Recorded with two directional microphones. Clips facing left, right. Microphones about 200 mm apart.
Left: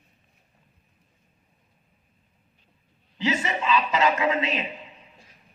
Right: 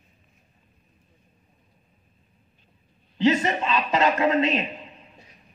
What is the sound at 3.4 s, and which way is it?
Speech, 45° right (ahead or behind).